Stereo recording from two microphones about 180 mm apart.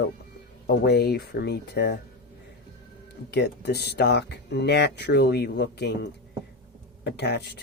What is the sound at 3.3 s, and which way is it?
Speech, 65° left (ahead or behind).